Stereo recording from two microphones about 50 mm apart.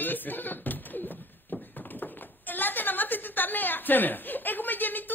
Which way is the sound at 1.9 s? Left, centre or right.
Left.